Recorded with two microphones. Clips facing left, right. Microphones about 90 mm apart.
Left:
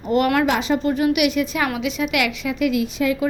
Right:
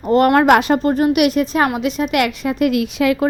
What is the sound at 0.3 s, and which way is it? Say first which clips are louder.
Speech: right 7 dB; 60° right (ahead or behind).